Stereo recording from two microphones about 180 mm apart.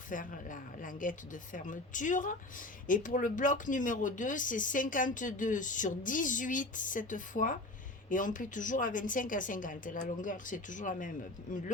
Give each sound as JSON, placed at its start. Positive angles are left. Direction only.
{"t": 0.1, "sound": "speech", "side_deg": 45}